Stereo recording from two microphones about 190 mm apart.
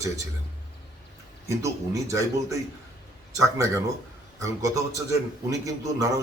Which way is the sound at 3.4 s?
15° right (ahead or behind).